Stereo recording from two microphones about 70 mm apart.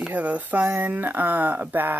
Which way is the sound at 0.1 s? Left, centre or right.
Right.